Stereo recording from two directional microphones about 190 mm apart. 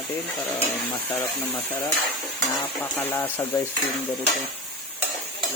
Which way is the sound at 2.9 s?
10° left (ahead or behind).